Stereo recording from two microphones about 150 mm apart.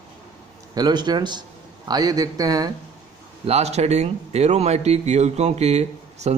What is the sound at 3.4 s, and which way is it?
A man's voice, 45° right (ahead or behind).